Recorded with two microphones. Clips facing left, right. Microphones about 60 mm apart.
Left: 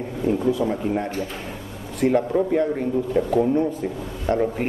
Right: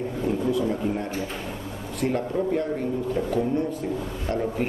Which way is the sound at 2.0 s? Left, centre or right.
Left.